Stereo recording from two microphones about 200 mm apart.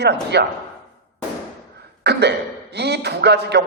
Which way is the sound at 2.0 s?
55° right (ahead or behind).